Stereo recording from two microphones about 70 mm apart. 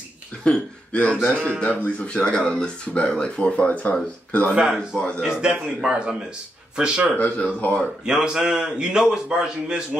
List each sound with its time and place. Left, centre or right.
0.4 s speech: centre
5.2 s a man's voice: centre
7.2 s speech: left
8.0 s a man's voice: centre